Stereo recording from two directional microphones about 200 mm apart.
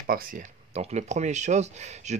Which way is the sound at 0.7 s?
35° right (ahead or behind).